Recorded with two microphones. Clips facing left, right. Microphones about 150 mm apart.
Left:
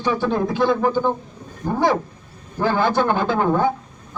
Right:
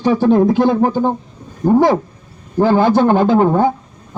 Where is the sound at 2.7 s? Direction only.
40° right (ahead or behind).